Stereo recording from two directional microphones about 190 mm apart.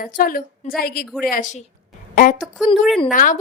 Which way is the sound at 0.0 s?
50° left (ahead or behind).